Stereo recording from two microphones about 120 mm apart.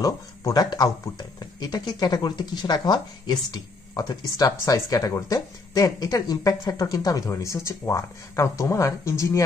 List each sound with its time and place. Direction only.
0.0 s speech: 30° left (ahead or behind)